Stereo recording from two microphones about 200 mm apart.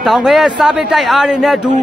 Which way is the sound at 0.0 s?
Centre (ahead or behind).